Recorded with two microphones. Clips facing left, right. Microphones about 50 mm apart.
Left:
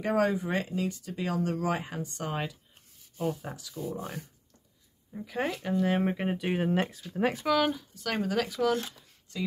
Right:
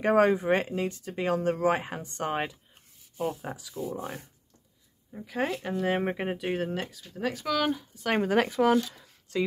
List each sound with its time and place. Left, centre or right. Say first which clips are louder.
0.0 s speech: right 5 dB; right
3.2 s speech: right 1 dB; centre
6.3 s speech: even; centre
6.7 s speech: left 5 dB; left
7.4 s speech: left 1 dB; centre
7.7 s speech: right 5 dB; centre
8.2 s speech: right 4 dB; right